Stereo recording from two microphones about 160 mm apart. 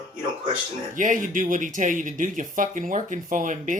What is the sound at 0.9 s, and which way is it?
Speech, 55° right (ahead or behind).